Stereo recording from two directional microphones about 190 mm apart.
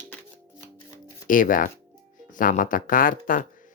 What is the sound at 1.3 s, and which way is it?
Speech, 45° left (ahead or behind).